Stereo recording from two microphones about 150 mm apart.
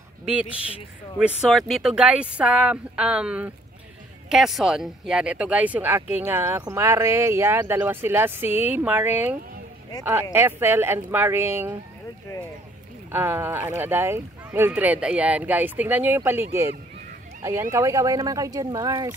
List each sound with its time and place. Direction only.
0.2 s speech: 10° right (ahead or behind)
13.1 s speech: 15° right (ahead or behind)